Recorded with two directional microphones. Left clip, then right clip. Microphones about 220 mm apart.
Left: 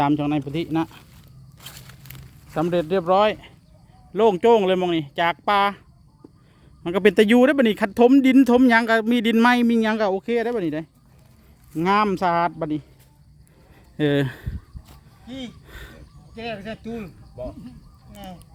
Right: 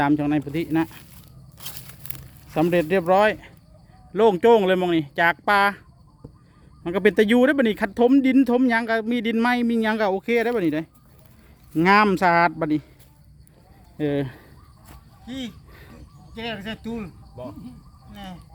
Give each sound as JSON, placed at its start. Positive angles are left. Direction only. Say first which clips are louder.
{"t": 0.0, "sound": "speech", "louder": "even", "side_deg": 15}
{"t": 1.5, "sound": "a sound", "louder": "right 2 dB", "side_deg": -15}
{"t": 2.5, "sound": "speech", "louder": "right 2 dB", "side_deg": 0}
{"t": 6.8, "sound": "speech", "louder": "left 2 dB", "side_deg": 15}
{"t": 13.9, "sound": "speech", "louder": "left 4 dB", "side_deg": 25}
{"t": 15.3, "sound": "speech", "louder": "right 2 dB", "side_deg": -55}
{"t": 15.7, "sound": "a sound", "louder": "left 5 dB", "side_deg": 25}
{"t": 16.3, "sound": "speech", "louder": "even", "side_deg": -50}
{"t": 18.1, "sound": "a sound", "louder": "even", "side_deg": -50}